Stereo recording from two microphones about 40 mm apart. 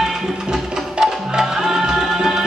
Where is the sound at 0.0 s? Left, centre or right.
Centre.